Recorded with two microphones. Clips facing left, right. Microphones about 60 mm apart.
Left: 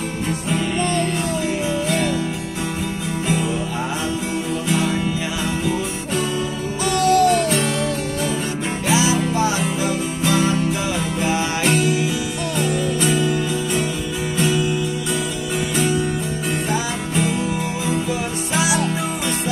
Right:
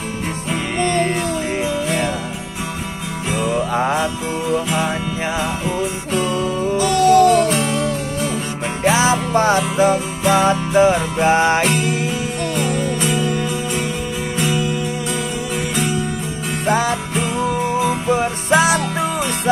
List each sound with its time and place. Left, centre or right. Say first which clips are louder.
3.3 s music: right 4 dB; right
8.8 s music: right 3 dB; right
13.3 s music: even; right
14.3 s music: left 1 dB; right
16.6 s music: right 5 dB; right